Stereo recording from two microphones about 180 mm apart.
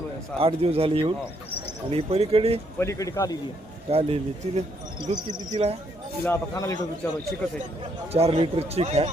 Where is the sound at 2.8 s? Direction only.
15° left (ahead or behind).